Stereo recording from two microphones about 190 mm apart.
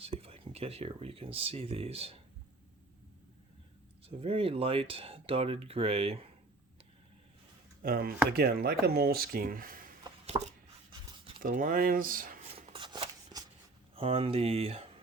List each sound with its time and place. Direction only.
0.0 s speech: 30° right (ahead or behind)
4.0 s speech: 30° right (ahead or behind)
7.8 s speech: 50° right (ahead or behind)
10.3 s speech: 25° right (ahead or behind)
11.4 s speech: 45° right (ahead or behind)
12.7 s scissors: 25° right (ahead or behind)
13.9 s speech: 30° right (ahead or behind)